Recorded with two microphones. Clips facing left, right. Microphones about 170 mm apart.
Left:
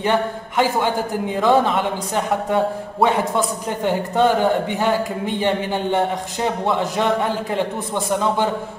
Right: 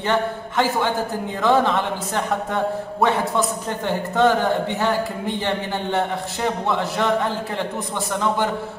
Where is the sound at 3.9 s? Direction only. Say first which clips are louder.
Left 1 dB; 15° left (ahead or behind).